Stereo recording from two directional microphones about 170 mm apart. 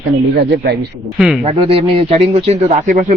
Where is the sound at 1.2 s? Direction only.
5° right (ahead or behind).